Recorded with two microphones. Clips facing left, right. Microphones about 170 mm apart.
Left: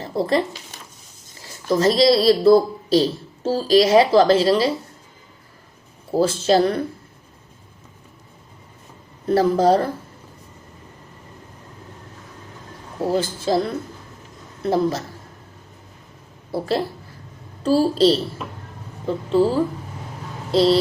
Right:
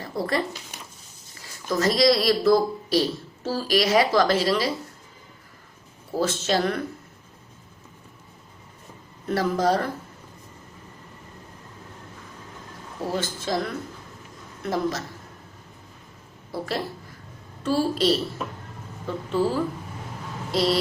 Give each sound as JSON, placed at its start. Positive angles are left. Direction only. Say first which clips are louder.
{"t": 0.0, "sound": "speech", "louder": "left 6 dB", "side_deg": 25}
{"t": 6.1, "sound": "speech", "louder": "left 7 dB", "side_deg": 30}
{"t": 9.2, "sound": "speech", "louder": "left 6 dB", "side_deg": 30}
{"t": 13.0, "sound": "speech", "louder": "left 7 dB", "side_deg": 30}
{"t": 16.5, "sound": "a woman's voice", "louder": "left 6 dB", "side_deg": 30}